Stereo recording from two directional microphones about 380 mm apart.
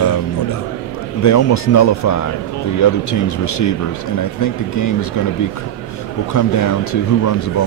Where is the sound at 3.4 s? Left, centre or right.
Left.